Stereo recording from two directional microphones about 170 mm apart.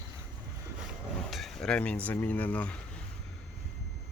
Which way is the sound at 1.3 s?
Centre (ahead or behind).